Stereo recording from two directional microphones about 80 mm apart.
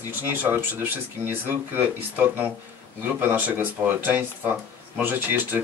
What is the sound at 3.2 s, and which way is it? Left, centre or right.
Speech, right.